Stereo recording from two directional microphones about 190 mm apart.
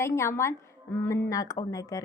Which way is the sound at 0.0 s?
15° left (ahead or behind).